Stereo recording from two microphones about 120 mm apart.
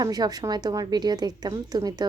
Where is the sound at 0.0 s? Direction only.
30° right (ahead or behind).